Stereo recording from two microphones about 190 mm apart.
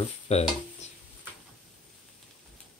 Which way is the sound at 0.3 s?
35° left (ahead or behind).